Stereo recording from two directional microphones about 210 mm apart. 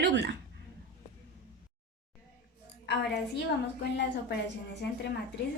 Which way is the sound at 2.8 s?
55° left (ahead or behind).